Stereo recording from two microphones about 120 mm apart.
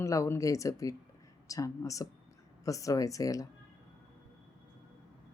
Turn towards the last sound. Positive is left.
turn(degrees=30)  # may be behind; listen again after turning